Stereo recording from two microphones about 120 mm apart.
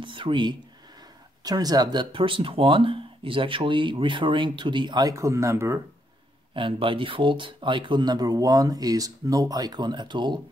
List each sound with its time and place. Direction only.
0.0 s speech: 45° right (ahead or behind); by 5.8 s 25° right (ahead or behind)
6.5 s speech: 45° right (ahead or behind)